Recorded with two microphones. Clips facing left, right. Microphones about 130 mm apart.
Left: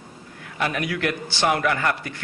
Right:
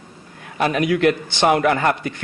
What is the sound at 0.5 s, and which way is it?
A man's voice, 25° right (ahead or behind).